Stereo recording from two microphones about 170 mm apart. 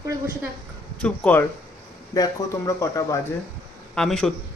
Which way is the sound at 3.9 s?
5° left (ahead or behind).